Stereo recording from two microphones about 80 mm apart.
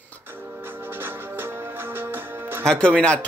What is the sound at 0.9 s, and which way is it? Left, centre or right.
Music, right.